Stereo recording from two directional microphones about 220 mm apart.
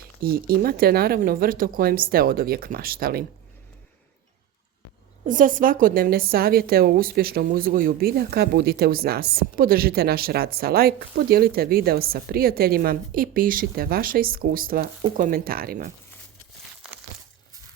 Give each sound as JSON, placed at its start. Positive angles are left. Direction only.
{"t": 0.2, "sound": "a woman's voice", "side_deg": -40}
{"t": 5.2, "sound": "a woman's voice", "side_deg": -35}